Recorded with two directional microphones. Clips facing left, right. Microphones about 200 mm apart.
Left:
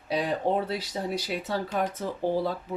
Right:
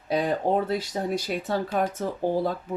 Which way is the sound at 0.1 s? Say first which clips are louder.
Right 3 dB; 45° right (ahead or behind).